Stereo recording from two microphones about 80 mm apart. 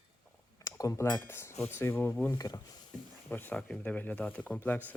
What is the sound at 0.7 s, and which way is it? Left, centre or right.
Speech, left.